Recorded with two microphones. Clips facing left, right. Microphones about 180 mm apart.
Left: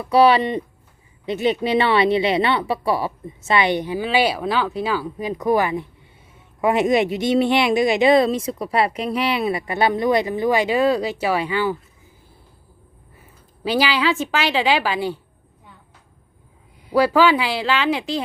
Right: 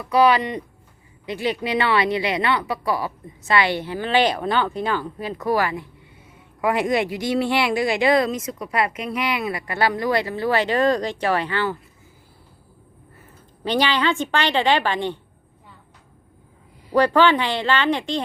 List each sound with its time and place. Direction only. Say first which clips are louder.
0.0 s speech: left 3 dB; 30° left (ahead or behind); by 11.8 s 10° left (ahead or behind)
13.7 s a woman's voice: left 1 dB; 5° left (ahead or behind)
16.9 s a woman's voice: left 1 dB; 5° left (ahead or behind)